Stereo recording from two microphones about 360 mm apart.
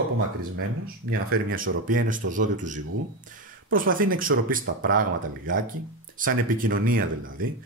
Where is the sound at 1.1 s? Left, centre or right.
Right.